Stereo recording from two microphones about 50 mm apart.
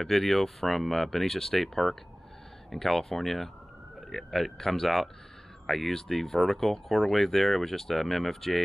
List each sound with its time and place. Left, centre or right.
0.0 s speech: centre